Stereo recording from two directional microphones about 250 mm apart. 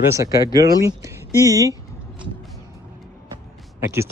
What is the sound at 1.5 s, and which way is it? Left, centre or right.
Speech, centre.